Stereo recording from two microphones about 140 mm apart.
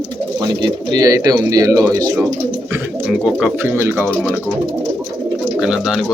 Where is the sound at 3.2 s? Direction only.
5° right (ahead or behind).